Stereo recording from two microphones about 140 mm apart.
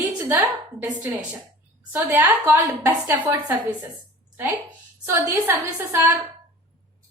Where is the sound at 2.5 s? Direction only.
20° right (ahead or behind).